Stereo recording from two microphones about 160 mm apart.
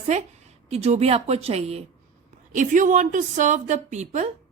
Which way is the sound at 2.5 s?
55° right (ahead or behind).